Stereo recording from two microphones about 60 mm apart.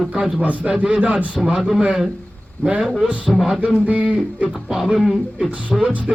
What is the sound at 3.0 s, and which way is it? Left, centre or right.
Speech, right.